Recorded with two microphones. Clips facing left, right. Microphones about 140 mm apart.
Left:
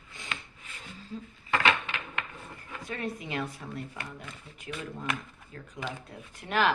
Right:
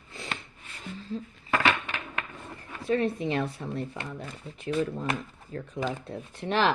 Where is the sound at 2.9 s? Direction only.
30° right (ahead or behind).